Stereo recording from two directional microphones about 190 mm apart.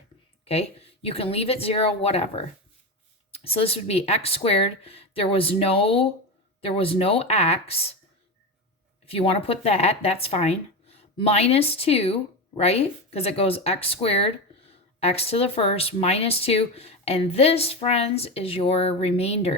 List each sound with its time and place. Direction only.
0.4 s speech: 30° left (ahead or behind)
9.0 s speech: 30° left (ahead or behind)